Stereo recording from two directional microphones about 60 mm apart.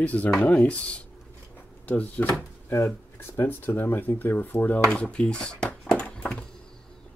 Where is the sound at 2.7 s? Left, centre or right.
Left.